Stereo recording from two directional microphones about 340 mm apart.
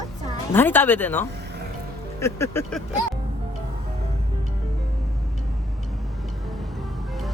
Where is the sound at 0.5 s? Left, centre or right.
Centre.